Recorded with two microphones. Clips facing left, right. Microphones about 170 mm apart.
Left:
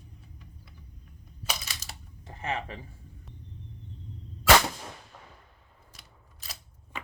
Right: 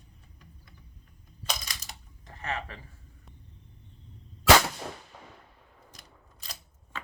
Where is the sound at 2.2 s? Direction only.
30° left (ahead or behind).